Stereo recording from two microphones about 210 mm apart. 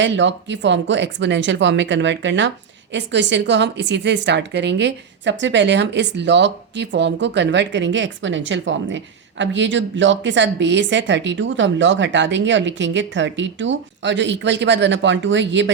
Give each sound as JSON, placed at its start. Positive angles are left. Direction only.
{"t": 0.0, "sound": "a woman's voice", "side_deg": -60}